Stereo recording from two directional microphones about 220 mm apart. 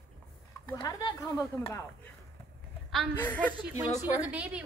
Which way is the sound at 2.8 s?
5° left (ahead or behind).